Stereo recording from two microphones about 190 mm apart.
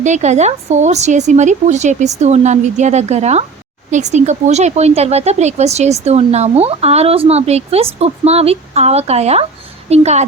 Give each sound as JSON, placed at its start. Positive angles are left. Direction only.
{"t": 0.0, "sound": "speech", "side_deg": -40}